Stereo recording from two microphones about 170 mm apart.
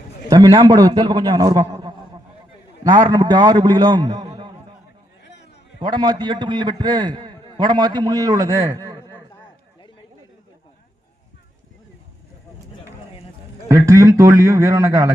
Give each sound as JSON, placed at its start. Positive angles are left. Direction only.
{"t": 0.3, "sound": "a man's voice", "side_deg": -20}
{"t": 5.2, "sound": "a sound", "side_deg": 90}
{"t": 5.8, "sound": "a man's voice", "side_deg": -25}
{"t": 13.7, "sound": "a man's voice", "side_deg": -20}